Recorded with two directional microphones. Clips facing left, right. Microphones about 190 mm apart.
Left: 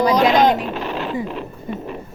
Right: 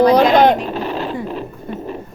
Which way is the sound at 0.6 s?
35° right (ahead or behind).